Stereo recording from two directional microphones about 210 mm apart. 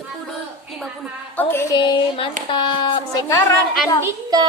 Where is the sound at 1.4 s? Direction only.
10° left (ahead or behind).